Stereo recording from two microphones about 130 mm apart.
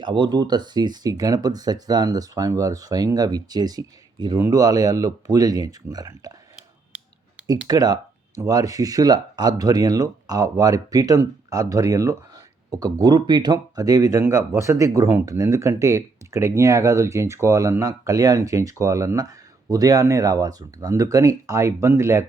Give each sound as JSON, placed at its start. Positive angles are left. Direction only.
{"t": 0.0, "sound": "speech", "side_deg": -35}
{"t": 7.7, "sound": "speech", "side_deg": -30}